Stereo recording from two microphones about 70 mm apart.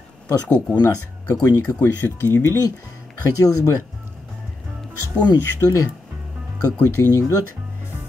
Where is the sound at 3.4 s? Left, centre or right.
Left.